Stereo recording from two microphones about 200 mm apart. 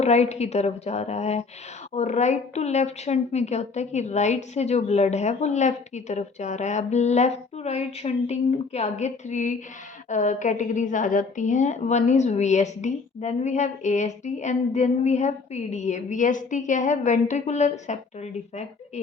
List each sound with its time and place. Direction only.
0.0 s a woman's voice: 35° left (ahead or behind)